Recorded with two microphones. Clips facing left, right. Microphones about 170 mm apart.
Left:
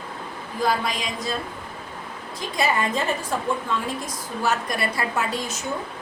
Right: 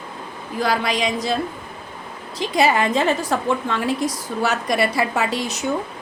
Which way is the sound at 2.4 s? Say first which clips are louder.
Right 6 dB; 75° right (ahead or behind).